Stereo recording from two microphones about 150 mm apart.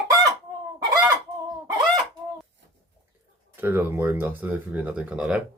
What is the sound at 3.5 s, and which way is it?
Speech, 15° right (ahead or behind).